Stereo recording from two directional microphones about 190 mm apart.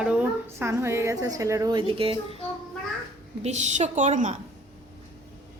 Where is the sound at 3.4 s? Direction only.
35° right (ahead or behind).